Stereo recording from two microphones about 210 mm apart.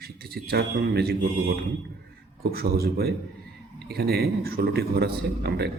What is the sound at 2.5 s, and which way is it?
A man's voice, 45° right (ahead or behind).